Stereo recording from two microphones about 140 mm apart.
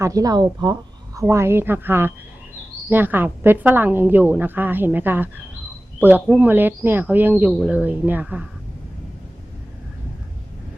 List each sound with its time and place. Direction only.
0.0 s speech: 25° right (ahead or behind)
1.3 s a woman's voice: 20° right (ahead or behind)